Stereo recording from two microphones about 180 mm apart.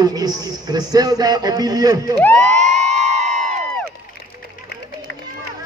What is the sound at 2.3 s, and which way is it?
Crowd, 40° right (ahead or behind).